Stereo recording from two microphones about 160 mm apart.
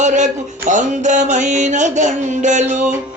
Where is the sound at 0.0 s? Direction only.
50° right (ahead or behind).